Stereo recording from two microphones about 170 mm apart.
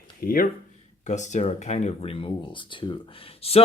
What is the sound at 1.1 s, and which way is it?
Speech, 45° left (ahead or behind).